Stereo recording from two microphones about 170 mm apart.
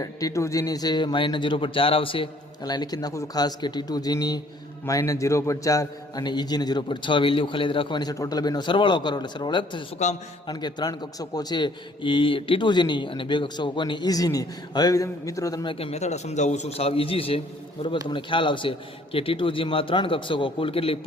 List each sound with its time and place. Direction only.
0.0 s a man's voice: 20° left (ahead or behind)